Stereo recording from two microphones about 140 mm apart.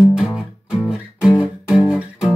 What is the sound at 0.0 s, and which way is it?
Music, 5° right (ahead or behind).